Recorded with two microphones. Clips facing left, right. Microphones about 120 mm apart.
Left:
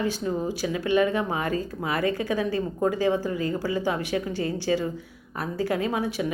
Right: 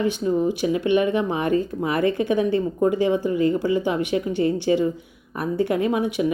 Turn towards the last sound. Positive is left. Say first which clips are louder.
# right 5 dB
turn(degrees=-20)  # may be behind; listen again after turning